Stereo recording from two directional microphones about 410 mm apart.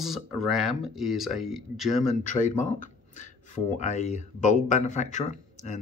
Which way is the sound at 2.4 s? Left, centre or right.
Centre.